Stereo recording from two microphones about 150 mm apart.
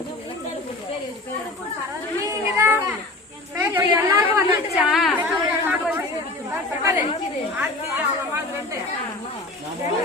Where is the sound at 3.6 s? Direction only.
15° right (ahead or behind).